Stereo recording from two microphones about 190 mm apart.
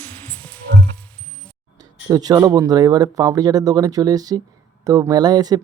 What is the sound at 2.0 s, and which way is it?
Speech, 20° right (ahead or behind).